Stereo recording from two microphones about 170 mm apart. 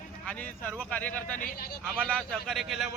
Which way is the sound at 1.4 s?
60° left (ahead or behind).